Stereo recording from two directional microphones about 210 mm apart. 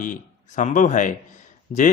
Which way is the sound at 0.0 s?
40° left (ahead or behind).